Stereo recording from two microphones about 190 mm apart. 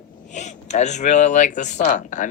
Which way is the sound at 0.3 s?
40° left (ahead or behind).